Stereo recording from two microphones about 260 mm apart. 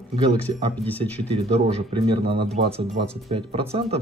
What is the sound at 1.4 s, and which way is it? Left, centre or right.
Speech, right.